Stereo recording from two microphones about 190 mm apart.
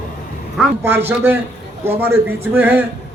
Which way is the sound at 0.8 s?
10° right (ahead or behind).